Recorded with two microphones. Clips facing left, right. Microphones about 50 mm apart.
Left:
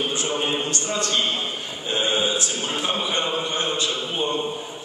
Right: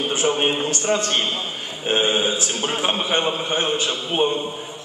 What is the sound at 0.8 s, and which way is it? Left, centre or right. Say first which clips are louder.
A man's voice: right 4 dB; right.